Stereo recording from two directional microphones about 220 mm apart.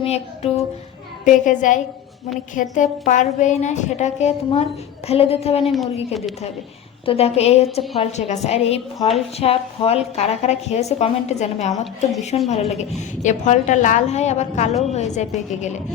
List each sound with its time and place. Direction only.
0.0 s a woman's voice: 25° left (ahead or behind)
7.0 s a woman's voice: 25° left (ahead or behind)